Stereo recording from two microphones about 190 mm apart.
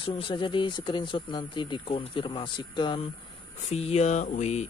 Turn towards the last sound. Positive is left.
turn(degrees=35)  # may be behind; listen again after turning